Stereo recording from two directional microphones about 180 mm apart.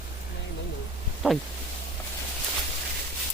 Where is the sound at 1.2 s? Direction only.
5° right (ahead or behind).